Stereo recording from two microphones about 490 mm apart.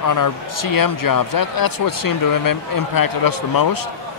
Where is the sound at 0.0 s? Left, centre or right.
Left.